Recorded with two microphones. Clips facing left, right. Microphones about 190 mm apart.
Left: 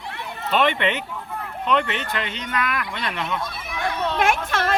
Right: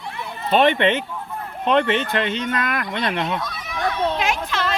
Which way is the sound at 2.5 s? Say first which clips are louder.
Right 1 dB; 40° right (ahead or behind).